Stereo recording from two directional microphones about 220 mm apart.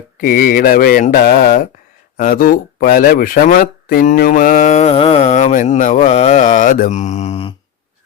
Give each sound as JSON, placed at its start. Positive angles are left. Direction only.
{"t": 0.2, "sound": "speech", "side_deg": 40}